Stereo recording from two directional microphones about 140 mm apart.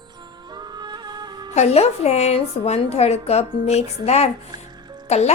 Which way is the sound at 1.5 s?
50° left (ahead or behind).